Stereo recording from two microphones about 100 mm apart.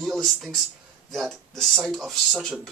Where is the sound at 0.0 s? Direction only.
Centre (ahead or behind).